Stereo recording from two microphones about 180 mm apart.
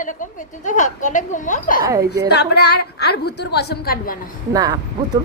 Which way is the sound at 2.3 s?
65° left (ahead or behind).